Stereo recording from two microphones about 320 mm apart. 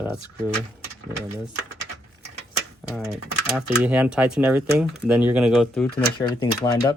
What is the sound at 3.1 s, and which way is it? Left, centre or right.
Speech, centre.